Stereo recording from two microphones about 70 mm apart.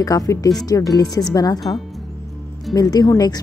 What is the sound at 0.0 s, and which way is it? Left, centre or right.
Speech, left.